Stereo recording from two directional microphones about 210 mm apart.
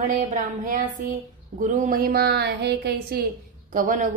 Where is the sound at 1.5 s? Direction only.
40° right (ahead or behind).